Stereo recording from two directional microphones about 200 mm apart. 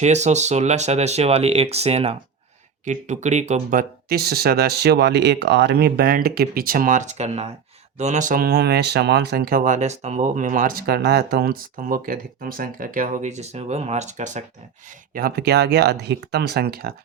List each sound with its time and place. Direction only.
0.0 s speech: 35° right (ahead or behind)
15.1 s speech: 50° right (ahead or behind)